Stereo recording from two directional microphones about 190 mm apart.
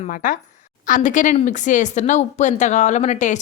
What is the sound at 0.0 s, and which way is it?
A woman's voice, 45° left (ahead or behind).